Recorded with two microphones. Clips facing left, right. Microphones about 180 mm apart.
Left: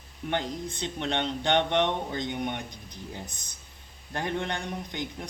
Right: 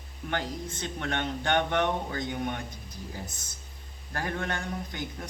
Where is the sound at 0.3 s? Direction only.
20° left (ahead or behind).